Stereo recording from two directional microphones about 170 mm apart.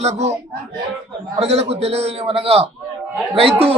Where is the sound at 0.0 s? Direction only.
40° right (ahead or behind).